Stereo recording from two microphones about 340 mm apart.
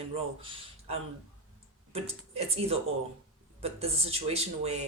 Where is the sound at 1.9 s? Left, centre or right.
Centre.